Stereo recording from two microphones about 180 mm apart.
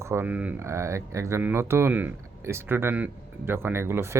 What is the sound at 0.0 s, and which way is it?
Speech, 15° right (ahead or behind).